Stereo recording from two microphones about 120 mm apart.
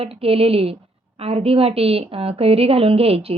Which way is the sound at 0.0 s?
55° right (ahead or behind).